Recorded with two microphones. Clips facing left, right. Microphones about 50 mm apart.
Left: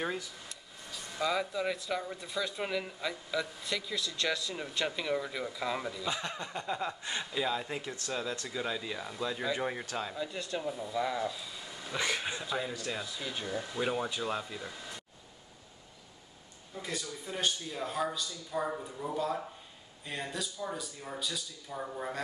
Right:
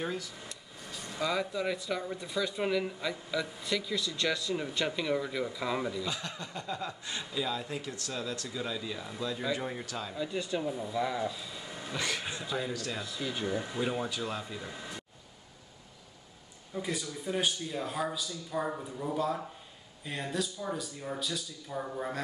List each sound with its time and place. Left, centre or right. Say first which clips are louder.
0.0 s speech: even; centre
1.2 s speech: even; centre
6.0 s speech: left 2 dB; left; by 11.7 s centre
12.0 s speech: left 2 dB; centre
12.4 s speech: right 1 dB; centre
14.0 s speech: left 1 dB; centre
14.7 s speech: right 2 dB; centre
16.7 s speech: right 4 dB; centre